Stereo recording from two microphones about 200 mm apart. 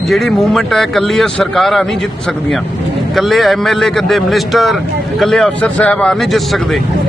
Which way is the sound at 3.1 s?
Centre (ahead or behind).